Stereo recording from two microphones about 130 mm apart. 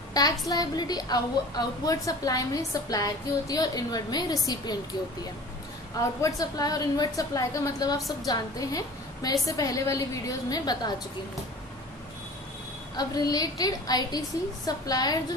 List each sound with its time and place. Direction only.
0.1 s a woman's voice: 30° left (ahead or behind)
6.2 s a woman's voice: 30° left (ahead or behind)
12.9 s a woman's voice: 30° left (ahead or behind)